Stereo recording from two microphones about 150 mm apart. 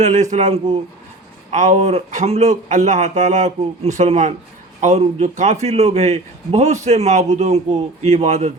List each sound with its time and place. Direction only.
0.0 s a man's voice: 50° right (ahead or behind)